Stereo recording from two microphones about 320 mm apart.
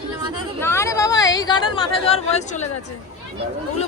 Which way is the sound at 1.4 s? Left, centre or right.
Centre.